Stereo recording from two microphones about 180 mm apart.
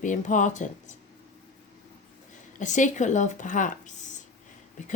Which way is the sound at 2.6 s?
45° left (ahead or behind).